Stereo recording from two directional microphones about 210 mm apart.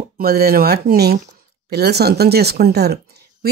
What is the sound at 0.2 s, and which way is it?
Speech, 45° right (ahead or behind).